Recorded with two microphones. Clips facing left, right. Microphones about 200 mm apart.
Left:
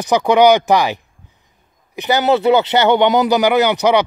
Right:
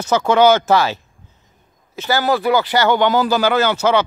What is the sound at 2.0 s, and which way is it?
Speech, 20° left (ahead or behind).